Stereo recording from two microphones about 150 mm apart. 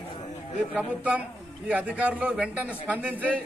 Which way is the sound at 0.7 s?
10° right (ahead or behind).